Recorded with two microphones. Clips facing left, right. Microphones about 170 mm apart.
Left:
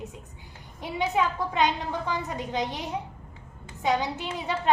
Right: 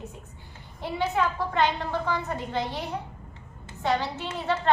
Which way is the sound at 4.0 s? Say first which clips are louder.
Even; 15° left (ahead or behind).